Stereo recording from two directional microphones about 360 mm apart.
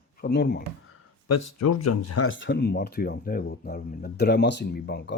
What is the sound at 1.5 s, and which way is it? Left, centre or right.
Speech, left.